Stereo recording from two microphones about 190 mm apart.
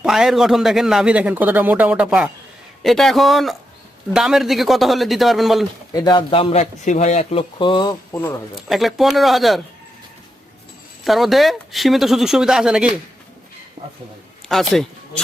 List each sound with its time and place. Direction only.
0.0 s speech: centre (ahead or behind)
5.9 s speech: 25° left (ahead or behind)
8.5 s speech: centre (ahead or behind)
11.0 s speech: centre (ahead or behind)
13.8 s a man's voice: 30° right (ahead or behind)
14.4 s speech: centre (ahead or behind)